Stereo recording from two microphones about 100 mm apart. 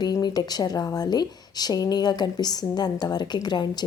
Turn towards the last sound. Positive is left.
turn(degrees=45)  # may be behind; listen again after turning